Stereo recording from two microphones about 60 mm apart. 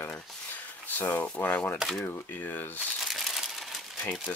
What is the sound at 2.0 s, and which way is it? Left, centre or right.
Speech, left.